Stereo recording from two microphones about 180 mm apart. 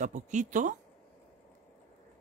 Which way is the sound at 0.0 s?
40° right (ahead or behind).